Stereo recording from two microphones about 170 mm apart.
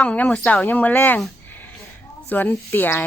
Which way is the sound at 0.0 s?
5° left (ahead or behind).